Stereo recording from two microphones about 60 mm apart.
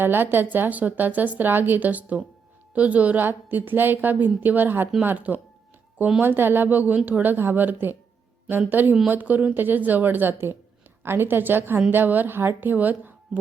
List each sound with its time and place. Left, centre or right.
0.0 s a woman's voice: right
6.2 s a woman's voice: right